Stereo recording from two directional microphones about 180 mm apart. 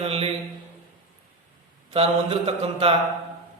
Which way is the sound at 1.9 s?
30° right (ahead or behind).